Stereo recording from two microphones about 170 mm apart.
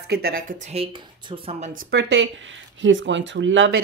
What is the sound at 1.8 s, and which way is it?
Speech, 85° right.